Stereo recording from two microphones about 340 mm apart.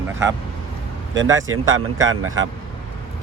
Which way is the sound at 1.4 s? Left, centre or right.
Right.